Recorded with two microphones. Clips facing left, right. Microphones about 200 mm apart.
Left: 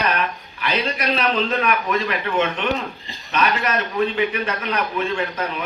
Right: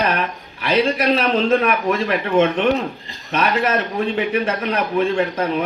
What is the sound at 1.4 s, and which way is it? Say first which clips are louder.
Speech: right 5 dB; 45° right (ahead or behind).